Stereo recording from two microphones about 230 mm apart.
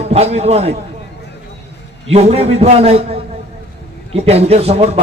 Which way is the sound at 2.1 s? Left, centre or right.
Right.